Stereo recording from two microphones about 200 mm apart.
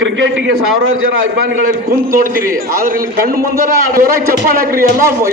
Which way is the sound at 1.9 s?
45° right (ahead or behind).